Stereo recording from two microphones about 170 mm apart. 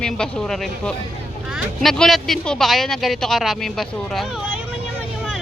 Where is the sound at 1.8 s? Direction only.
Centre (ahead or behind).